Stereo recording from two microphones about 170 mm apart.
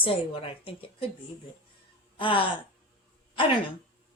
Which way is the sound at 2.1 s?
30° left (ahead or behind).